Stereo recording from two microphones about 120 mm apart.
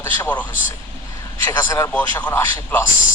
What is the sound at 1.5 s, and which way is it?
Speech, 25° left (ahead or behind).